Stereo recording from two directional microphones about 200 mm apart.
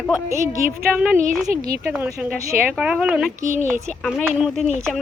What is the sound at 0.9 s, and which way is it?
Speech, 5° right (ahead or behind).